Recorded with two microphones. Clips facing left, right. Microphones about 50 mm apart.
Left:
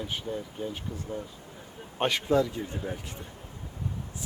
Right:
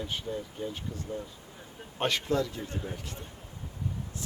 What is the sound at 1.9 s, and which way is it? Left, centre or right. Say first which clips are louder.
Speech: left 4 dB; centre.